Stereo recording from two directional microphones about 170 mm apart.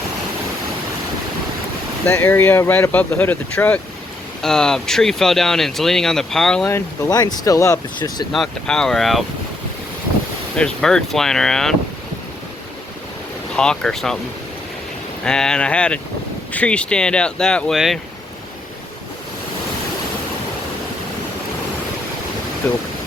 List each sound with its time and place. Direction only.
2.0 s speech: 15° left (ahead or behind)
6.7 s speech: 15° left (ahead or behind)
8.3 s speech: 5° left (ahead or behind)
10.6 s speech: 5° left (ahead or behind)
13.6 s speech: 5° left (ahead or behind)
15.2 s speech: 5° left (ahead or behind)
22.6 s speech: 10° left (ahead or behind)